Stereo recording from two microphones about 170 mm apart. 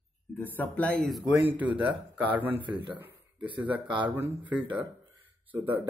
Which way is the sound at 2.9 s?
10° right (ahead or behind).